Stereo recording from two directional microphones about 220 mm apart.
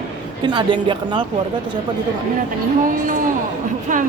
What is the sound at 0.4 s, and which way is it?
Speech, 20° right (ahead or behind).